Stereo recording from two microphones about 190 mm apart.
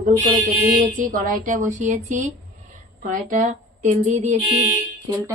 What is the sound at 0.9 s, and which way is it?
A woman's voice, 45° right (ahead or behind).